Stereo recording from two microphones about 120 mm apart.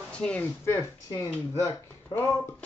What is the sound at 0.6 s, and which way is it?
Speech, 20° left (ahead or behind).